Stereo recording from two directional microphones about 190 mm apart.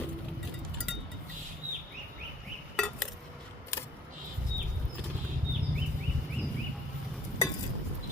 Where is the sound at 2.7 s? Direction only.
5° left (ahead or behind).